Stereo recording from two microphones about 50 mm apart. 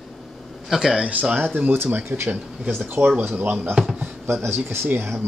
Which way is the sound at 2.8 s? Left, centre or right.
Right.